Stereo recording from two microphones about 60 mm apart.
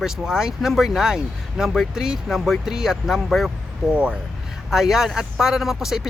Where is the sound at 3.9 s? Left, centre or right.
Centre.